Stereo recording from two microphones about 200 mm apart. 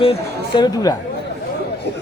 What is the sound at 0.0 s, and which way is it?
Speech, 25° left (ahead or behind).